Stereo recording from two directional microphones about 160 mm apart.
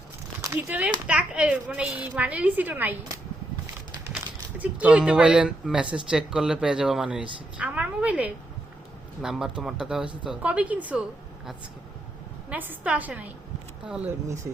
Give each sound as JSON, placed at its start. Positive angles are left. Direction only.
{"t": 0.5, "sound": "speech", "side_deg": -10}
{"t": 4.5, "sound": "speech", "side_deg": -10}
{"t": 12.5, "sound": "speech", "side_deg": -10}